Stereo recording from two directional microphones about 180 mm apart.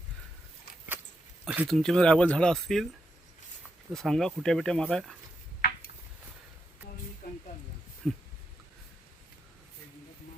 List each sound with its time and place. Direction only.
1.5 s speech: 5° right (ahead or behind)
3.9 s speech: centre (ahead or behind)
7.2 s snake: 55° left (ahead or behind)
8.0 s speech: 5° left (ahead or behind)